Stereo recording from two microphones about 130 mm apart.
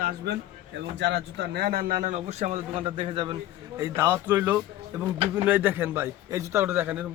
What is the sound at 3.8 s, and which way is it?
A man's voice, 20° right (ahead or behind).